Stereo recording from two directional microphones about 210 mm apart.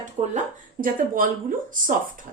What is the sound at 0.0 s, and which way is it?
Speech, 35° right (ahead or behind).